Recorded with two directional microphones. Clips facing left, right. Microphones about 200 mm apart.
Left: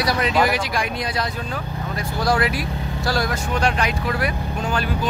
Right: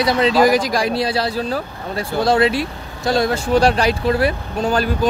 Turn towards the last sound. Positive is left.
turn(degrees=-35)  # may be behind; listen again after turning